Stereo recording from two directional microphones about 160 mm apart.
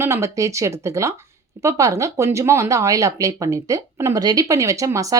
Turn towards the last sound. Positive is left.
turn(degrees=-20)  # may be behind; listen again after turning